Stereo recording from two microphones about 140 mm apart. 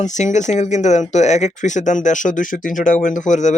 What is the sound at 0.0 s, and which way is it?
Speech, 60° left (ahead or behind).